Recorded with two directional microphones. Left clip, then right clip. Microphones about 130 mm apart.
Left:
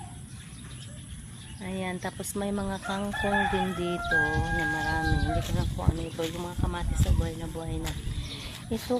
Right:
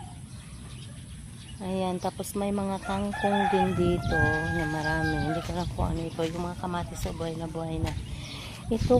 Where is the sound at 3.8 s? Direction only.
65° right (ahead or behind).